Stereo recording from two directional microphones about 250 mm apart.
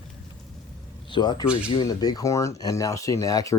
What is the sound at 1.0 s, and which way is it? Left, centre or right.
Speech, centre.